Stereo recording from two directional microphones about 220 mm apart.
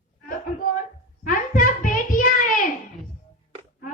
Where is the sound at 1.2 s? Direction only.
40° left (ahead or behind).